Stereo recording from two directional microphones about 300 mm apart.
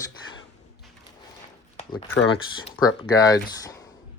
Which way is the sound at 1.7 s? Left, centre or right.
Centre.